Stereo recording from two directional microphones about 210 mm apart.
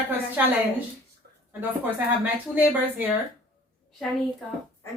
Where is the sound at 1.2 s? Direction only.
50° right (ahead or behind).